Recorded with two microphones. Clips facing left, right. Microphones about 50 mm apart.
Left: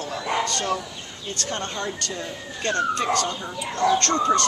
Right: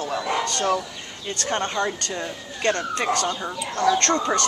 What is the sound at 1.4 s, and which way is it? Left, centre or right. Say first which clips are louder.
Speech: right 5 dB; right.